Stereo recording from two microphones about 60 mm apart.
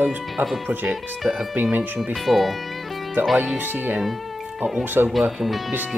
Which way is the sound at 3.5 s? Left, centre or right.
Right.